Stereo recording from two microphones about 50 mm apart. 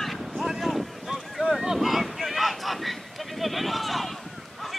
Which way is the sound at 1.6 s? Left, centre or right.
Centre.